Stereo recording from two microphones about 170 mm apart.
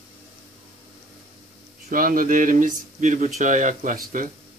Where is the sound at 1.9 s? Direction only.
55° right (ahead or behind).